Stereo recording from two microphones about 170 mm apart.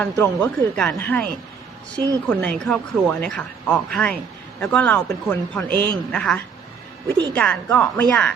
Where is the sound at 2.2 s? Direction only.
10° left (ahead or behind).